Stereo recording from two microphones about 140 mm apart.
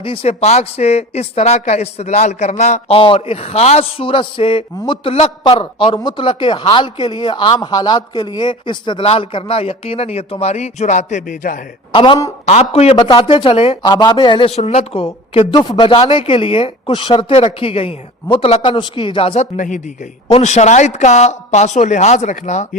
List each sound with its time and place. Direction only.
0.0 s a man's voice: 40° left (ahead or behind); by 11.6 s 70° left (ahead or behind)
11.9 s a man's voice: 35° left (ahead or behind)
12.5 s a man's voice: 50° left (ahead or behind)
14.5 s a man's voice: 50° left (ahead or behind)
19.5 s speech: 65° left (ahead or behind)
20.2 s speech: 50° left (ahead or behind)